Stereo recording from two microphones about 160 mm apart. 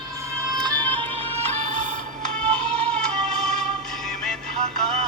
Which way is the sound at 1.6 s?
50° right (ahead or behind).